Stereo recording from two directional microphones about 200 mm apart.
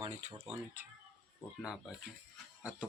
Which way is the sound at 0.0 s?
35° right (ahead or behind).